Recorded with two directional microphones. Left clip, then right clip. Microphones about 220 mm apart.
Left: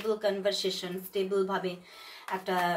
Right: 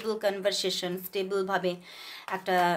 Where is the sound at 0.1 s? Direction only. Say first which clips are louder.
Right 1 dB; 50° right (ahead or behind).